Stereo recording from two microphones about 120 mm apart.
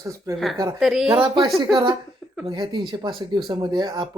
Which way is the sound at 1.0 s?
45° right (ahead or behind).